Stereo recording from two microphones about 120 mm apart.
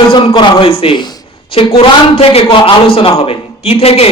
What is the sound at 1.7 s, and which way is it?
A man's voice, 55° left (ahead or behind).